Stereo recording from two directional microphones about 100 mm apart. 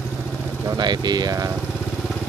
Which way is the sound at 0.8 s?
45° right (ahead or behind).